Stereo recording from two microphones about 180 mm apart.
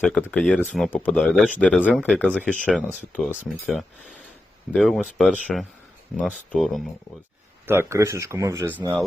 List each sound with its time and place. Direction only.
0.0 s speech: 10° left (ahead or behind)
7.7 s speech: 15° right (ahead or behind)